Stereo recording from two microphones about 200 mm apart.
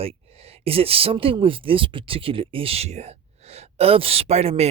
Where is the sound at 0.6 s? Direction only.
30° right (ahead or behind).